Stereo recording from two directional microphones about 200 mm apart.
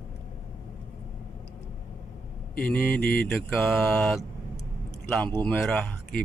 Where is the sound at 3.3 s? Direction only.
5° left (ahead or behind).